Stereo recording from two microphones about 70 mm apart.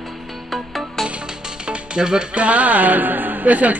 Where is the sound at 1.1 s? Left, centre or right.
Centre.